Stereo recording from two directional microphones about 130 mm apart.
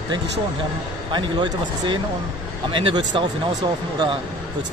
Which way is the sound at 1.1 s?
35° right (ahead or behind).